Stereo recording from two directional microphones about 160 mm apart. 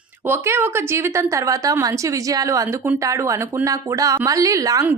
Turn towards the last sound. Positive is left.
turn(degrees=-20)  # may be behind; listen again after turning